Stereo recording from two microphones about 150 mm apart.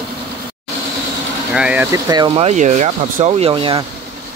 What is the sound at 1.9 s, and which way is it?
Speech, 25° right (ahead or behind).